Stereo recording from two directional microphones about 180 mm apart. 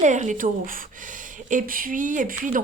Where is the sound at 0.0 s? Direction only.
40° right (ahead or behind).